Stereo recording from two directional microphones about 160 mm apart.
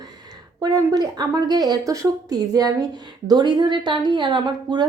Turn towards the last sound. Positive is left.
turn(degrees=-25)  # may be behind; listen again after turning